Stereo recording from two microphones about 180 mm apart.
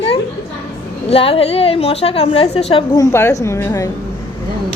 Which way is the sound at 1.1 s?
30° left (ahead or behind).